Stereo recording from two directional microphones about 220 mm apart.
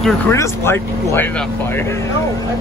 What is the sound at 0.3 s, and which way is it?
Speech, 10° left (ahead or behind).